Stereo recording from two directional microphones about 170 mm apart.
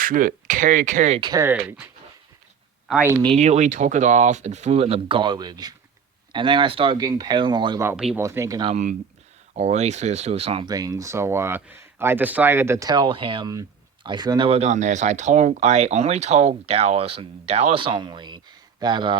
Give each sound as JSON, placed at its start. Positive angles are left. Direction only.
{"t": 0.0, "sound": "speech", "side_deg": -55}
{"t": 1.2, "sound": "speech", "side_deg": -20}
{"t": 2.8, "sound": "speech", "side_deg": -5}
{"t": 3.3, "sound": "speech", "side_deg": -40}
{"t": 7.8, "sound": "speech", "side_deg": -10}
{"t": 8.6, "sound": "speech", "side_deg": -45}